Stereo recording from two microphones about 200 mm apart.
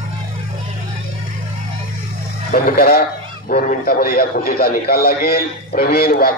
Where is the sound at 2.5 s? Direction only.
45° left (ahead or behind).